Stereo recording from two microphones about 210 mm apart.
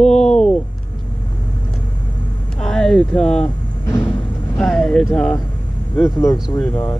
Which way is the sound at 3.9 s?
15° left (ahead or behind).